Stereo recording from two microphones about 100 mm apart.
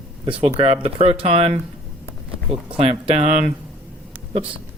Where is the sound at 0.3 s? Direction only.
75° right (ahead or behind).